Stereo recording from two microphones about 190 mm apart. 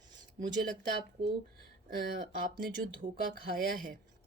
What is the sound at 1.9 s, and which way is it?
Speech, 50° right (ahead or behind).